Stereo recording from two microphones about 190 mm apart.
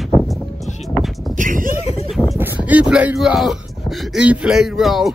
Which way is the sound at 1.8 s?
35° left (ahead or behind).